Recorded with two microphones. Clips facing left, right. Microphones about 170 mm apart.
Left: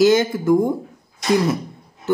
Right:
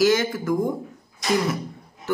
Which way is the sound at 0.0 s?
25° left (ahead or behind).